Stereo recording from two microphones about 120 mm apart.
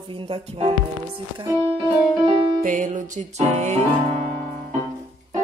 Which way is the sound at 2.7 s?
90° right.